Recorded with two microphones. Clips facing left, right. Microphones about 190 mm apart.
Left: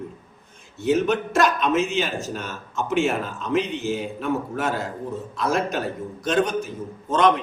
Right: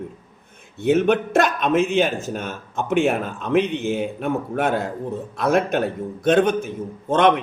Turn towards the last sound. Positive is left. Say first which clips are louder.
# right 2 dB
turn(degrees=-60)  # may be behind; listen again after turning